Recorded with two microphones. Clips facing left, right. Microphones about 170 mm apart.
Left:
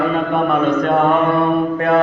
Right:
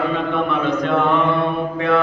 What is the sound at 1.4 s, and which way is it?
Mantra, 50° left (ahead or behind).